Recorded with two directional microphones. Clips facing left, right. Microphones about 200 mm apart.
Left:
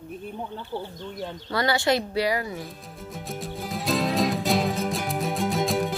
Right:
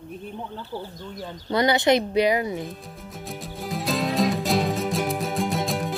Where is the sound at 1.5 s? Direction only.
20° right (ahead or behind).